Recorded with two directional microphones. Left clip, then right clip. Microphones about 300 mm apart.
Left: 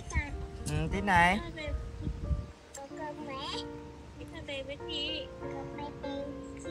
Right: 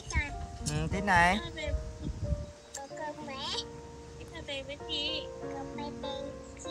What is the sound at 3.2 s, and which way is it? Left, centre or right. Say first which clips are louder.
Music: right 1 dB; centre.